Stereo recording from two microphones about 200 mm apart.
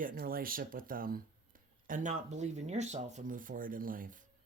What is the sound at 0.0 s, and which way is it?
Speech, 45° right (ahead or behind).